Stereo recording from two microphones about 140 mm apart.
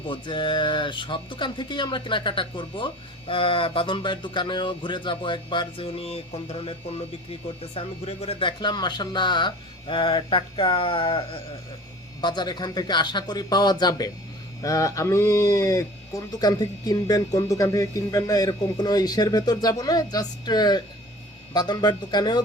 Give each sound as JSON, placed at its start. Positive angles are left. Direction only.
{"t": 0.1, "sound": "speech", "side_deg": 35}